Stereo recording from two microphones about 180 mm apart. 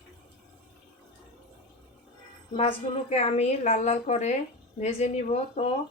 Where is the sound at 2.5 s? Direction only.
35° left (ahead or behind).